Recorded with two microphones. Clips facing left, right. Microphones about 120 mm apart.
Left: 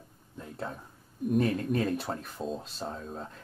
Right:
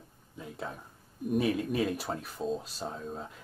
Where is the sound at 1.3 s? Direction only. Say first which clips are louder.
Left 1 dB; 5° right (ahead or behind).